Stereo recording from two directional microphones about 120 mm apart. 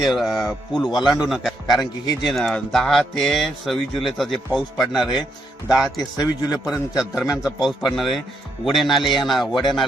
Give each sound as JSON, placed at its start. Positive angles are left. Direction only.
{"t": 0.0, "sound": "speech", "side_deg": 0}
{"t": 6.0, "sound": "a man's voice", "side_deg": 35}
{"t": 6.9, "sound": "speech", "side_deg": -5}